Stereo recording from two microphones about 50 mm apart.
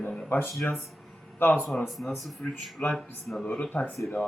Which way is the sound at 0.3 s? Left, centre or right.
Left.